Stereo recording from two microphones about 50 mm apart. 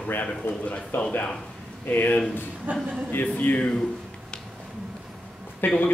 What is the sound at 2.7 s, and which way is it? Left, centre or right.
Speech, right.